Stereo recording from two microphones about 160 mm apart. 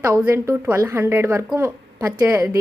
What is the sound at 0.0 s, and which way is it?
A woman's voice, 15° right (ahead or behind).